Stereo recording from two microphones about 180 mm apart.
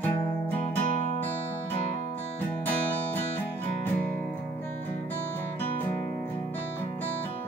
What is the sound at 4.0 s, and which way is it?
Music, 50° right (ahead or behind).